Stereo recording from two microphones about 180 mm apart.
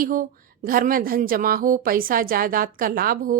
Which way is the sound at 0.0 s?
50° right (ahead or behind).